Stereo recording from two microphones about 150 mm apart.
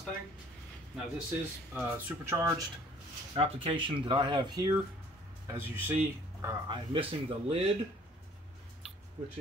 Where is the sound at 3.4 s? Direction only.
35° right (ahead or behind).